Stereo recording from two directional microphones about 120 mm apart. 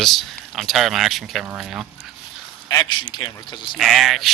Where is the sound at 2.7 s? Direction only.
35° left (ahead or behind).